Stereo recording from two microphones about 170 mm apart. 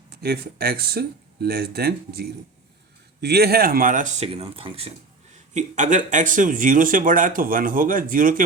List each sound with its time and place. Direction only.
0.2 s speech: 65° right (ahead or behind)
4.3 s speech: 35° right (ahead or behind)
5.5 s speech: 45° right (ahead or behind)